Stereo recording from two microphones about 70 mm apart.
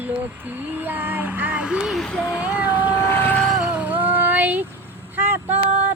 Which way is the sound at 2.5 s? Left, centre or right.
Left.